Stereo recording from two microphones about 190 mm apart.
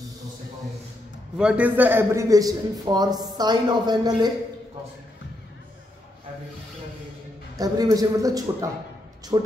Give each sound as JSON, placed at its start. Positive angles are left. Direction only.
{"t": 1.4, "sound": "a man's voice", "side_deg": -5}
{"t": 7.5, "sound": "a man's voice", "side_deg": -20}